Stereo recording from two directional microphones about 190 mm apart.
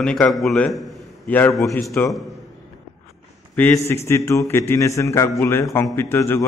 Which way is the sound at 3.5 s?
10° left (ahead or behind).